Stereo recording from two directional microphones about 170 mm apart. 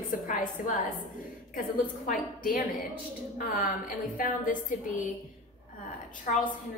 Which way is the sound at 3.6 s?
55° left (ahead or behind).